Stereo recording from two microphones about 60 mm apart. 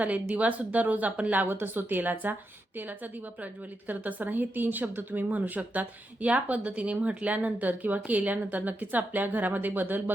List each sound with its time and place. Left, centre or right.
0.0 s speech: right
3.8 s speech: right